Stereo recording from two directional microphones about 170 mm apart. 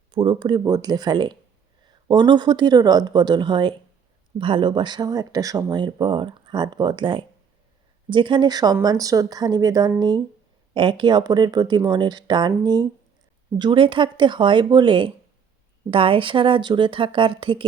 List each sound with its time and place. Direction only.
0.1 s speech: 30° right (ahead or behind)